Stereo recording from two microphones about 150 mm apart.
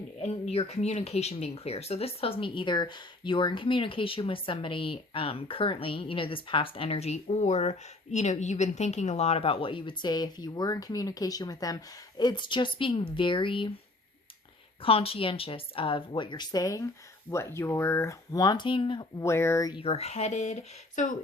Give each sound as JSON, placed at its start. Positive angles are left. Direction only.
{"t": 0.2, "sound": "speech", "side_deg": 45}
{"t": 14.8, "sound": "speech", "side_deg": 40}
{"t": 19.2, "sound": "speech", "side_deg": 20}
{"t": 19.8, "sound": "speech", "side_deg": 45}